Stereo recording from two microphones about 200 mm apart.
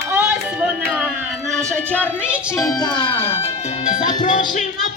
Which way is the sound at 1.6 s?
5° left (ahead or behind).